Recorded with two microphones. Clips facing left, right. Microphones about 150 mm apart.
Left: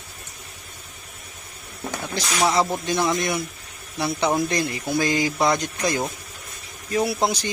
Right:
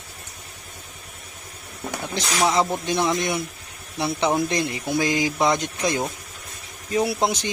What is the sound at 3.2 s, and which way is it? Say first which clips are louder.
Speech: even; 25° right (ahead or behind).